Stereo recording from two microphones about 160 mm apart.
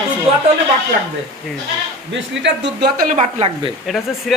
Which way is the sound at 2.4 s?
75° right (ahead or behind).